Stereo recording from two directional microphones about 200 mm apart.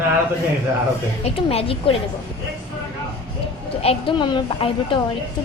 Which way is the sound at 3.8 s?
25° left (ahead or behind).